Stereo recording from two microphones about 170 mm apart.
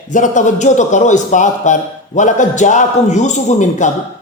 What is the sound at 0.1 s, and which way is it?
A man's voice, 45° left (ahead or behind).